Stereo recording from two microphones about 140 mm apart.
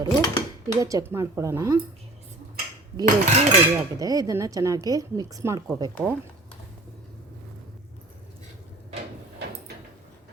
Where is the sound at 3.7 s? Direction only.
25° right (ahead or behind).